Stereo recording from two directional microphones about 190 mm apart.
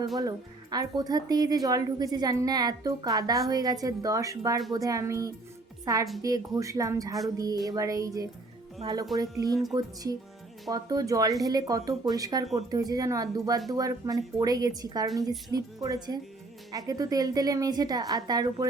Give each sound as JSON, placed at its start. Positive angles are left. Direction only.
{"t": 0.2, "sound": "a woman's voice", "side_deg": -20}